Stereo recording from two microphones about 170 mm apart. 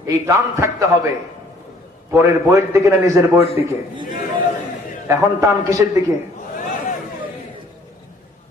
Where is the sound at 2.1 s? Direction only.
15° right (ahead or behind).